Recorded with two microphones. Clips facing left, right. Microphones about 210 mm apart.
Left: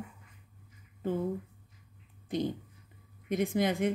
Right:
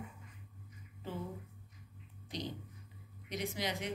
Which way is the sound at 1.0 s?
55° left (ahead or behind).